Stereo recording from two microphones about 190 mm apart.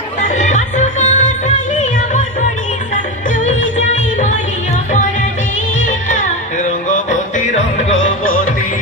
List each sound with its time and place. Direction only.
0.2 s music: 40° left (ahead or behind)
3.4 s music: 40° left (ahead or behind)
6.6 s music: 40° left (ahead or behind)